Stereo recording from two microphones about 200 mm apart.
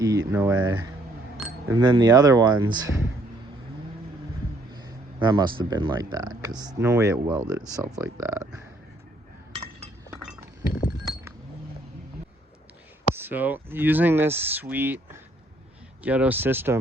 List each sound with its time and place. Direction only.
0.0 s speech: 15° right (ahead or behind)
4.7 s speech: 20° right (ahead or behind)
10.1 s chink: 10° right (ahead or behind)
13.1 s speech: 10° right (ahead or behind)